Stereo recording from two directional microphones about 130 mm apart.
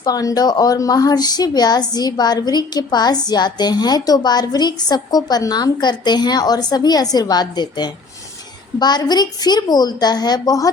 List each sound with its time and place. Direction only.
0.0 s a woman's voice: 30° left (ahead or behind)